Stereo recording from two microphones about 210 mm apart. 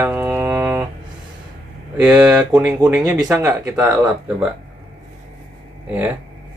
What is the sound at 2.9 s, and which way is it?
Speech, 15° right (ahead or behind).